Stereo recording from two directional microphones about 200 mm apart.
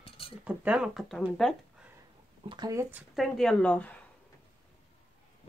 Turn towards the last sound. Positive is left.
turn(degrees=5)  # may be behind; listen again after turning